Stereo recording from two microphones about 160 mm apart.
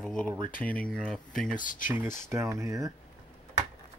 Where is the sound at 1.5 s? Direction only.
55° left (ahead or behind).